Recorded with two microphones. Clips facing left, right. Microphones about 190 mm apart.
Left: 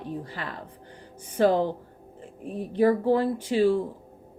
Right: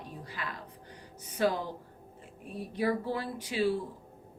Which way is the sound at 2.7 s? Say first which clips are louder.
Left 10 dB; 55° left (ahead or behind).